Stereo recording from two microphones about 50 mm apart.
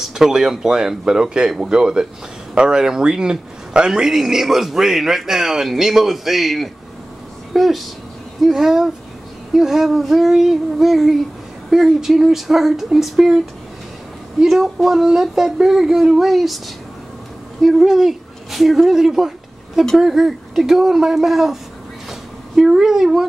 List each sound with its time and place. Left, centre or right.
0.0 s speech: centre
7.5 s child singing: centre
8.4 s speech: centre
9.5 s child singing: centre
14.4 s speech: centre
20.0 s child singing: centre
22.7 s speech: centre